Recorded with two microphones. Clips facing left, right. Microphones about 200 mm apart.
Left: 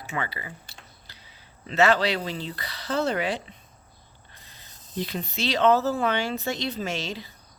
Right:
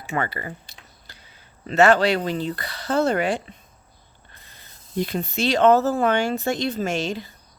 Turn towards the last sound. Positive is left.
turn(degrees=-50)  # may be behind; listen again after turning